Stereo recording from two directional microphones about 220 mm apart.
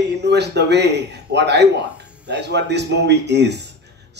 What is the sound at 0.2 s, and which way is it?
Speech, 50° right (ahead or behind).